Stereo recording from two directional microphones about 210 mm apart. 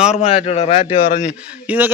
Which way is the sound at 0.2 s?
30° left (ahead or behind).